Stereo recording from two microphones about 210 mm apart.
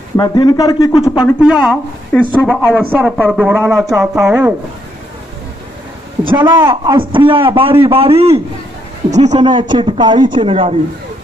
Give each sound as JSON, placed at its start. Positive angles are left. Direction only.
{"t": 0.2, "sound": "speech", "side_deg": 20}
{"t": 1.2, "sound": "speech", "side_deg": -5}
{"t": 6.2, "sound": "a man's voice", "side_deg": -20}
{"t": 9.3, "sound": "a man's voice", "side_deg": -20}